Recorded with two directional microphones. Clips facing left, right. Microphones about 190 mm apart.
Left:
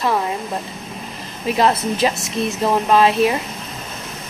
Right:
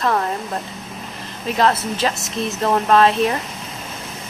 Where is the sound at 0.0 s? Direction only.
5° left (ahead or behind).